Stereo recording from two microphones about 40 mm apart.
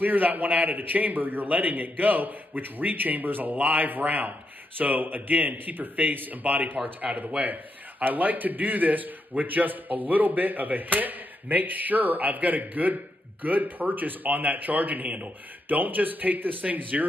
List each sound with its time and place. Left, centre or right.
0.0 s a man's voice: right
7.0 s a man's voice: right